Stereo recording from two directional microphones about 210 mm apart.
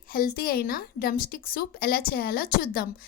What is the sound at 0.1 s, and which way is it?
A woman's voice, 45° left (ahead or behind).